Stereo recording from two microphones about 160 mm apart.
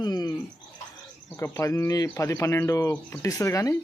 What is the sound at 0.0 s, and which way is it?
Bird, 25° left (ahead or behind).